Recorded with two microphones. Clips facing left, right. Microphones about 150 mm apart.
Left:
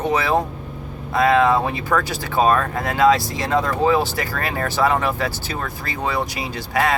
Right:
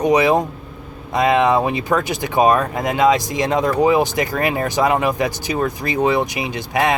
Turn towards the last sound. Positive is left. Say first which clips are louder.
# right 2 dB
turn(degrees=-20)  # may be behind; listen again after turning